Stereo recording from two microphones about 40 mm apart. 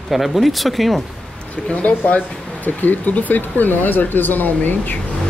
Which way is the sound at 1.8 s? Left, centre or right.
Left.